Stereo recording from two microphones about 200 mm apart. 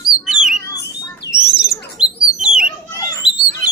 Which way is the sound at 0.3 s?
Centre (ahead or behind).